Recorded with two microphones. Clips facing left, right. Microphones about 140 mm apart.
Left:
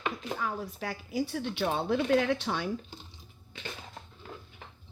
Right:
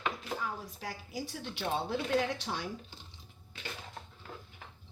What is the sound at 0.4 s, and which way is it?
A woman's voice, 70° left (ahead or behind).